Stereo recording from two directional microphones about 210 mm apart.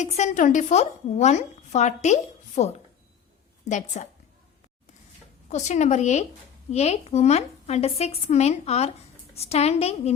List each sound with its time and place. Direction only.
0.0 s a woman's voice: 35° left (ahead or behind)
5.5 s a woman's voice: 35° left (ahead or behind)